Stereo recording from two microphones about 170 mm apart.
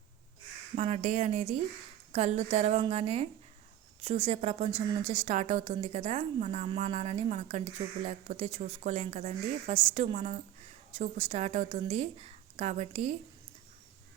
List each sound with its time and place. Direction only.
0.8 s a woman's voice: 40° right (ahead or behind)